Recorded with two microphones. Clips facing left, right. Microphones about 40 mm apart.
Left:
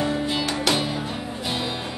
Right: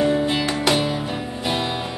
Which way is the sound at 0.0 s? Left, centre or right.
Centre.